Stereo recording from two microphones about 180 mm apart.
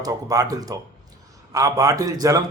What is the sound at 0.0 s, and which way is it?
A man's voice, 20° right (ahead or behind).